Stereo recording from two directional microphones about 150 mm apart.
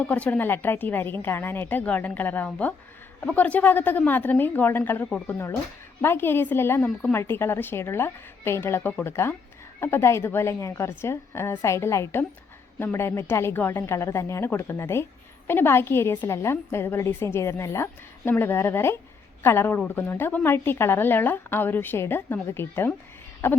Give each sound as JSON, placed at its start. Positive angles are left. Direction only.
{"t": 0.0, "sound": "a woman's voice", "side_deg": 10}
{"t": 6.0, "sound": "a woman's voice", "side_deg": 15}